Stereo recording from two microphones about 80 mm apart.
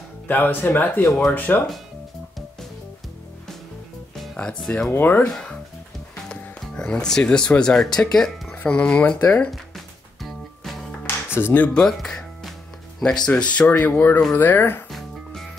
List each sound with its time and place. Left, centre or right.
0.3 s speech: left
4.4 s speech: centre
4.9 s speech: left
5.2 s speech: centre
10.2 s music: centre
11.1 s music: left
11.8 s music: centre
13.0 s speech: centre; by 14.8 s left
14.9 s music: centre